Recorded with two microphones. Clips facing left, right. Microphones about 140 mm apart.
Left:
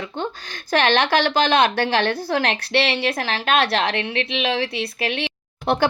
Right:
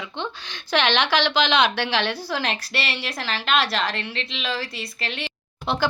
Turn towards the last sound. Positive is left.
turn(degrees=55)  # may be behind; listen again after turning